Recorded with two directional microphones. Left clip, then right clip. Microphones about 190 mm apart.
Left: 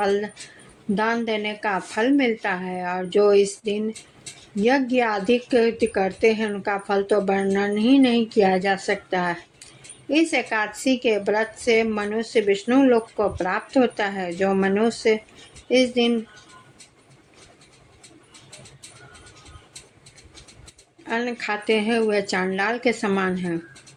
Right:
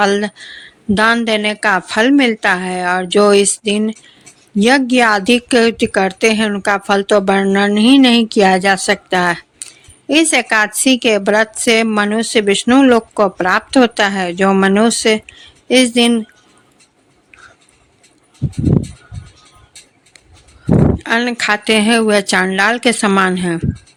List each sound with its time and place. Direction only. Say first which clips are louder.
0.0 s a woman's voice: right 8 dB; 40° right (ahead or behind)
21.0 s a woman's voice: right 11 dB; 40° right (ahead or behind)